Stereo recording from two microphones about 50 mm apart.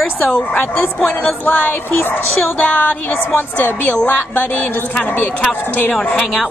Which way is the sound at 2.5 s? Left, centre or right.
Left.